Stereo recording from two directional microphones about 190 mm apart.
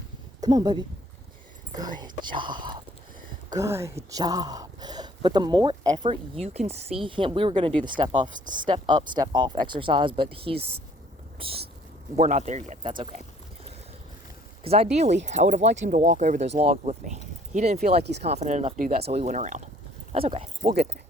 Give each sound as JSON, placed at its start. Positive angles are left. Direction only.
{"t": 0.4, "sound": "speech", "side_deg": -20}
{"t": 13.0, "sound": "speech", "side_deg": -30}
{"t": 14.6, "sound": "speech", "side_deg": -30}
{"t": 17.8, "sound": "speech", "side_deg": -60}
{"t": 18.2, "sound": "speech", "side_deg": -35}
{"t": 19.0, "sound": "speech", "side_deg": -35}